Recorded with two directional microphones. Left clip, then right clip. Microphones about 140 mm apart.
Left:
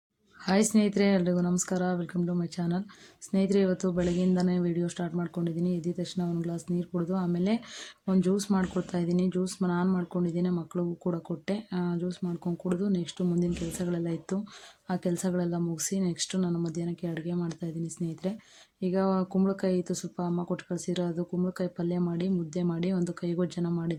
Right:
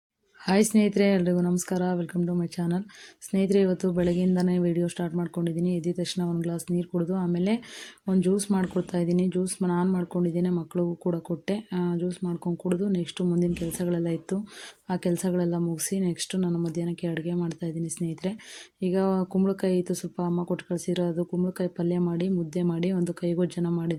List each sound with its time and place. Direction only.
0.4 s speech: 15° right (ahead or behind)